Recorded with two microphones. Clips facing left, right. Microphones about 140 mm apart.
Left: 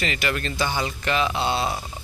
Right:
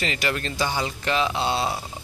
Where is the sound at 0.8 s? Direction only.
25° right (ahead or behind).